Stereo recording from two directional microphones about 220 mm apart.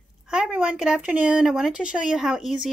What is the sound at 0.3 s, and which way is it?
Speech, 5° right (ahead or behind).